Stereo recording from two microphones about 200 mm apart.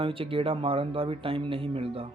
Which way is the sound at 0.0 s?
25° right (ahead or behind).